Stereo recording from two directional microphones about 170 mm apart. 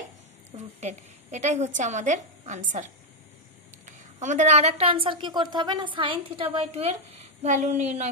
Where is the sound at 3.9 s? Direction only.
45° right (ahead or behind).